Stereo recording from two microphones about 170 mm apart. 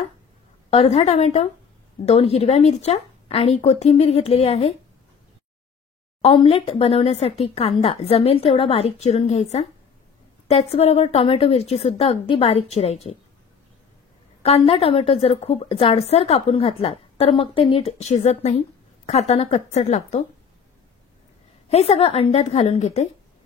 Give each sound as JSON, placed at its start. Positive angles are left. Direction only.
{"t": 0.7, "sound": "a woman's voice", "side_deg": 35}
{"t": 6.2, "sound": "a woman's voice", "side_deg": 35}
{"t": 14.4, "sound": "a woman's voice", "side_deg": 35}
{"t": 21.6, "sound": "a woman's voice", "side_deg": 40}